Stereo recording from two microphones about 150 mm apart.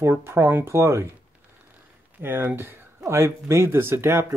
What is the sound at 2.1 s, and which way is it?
Speech, 15° right (ahead or behind).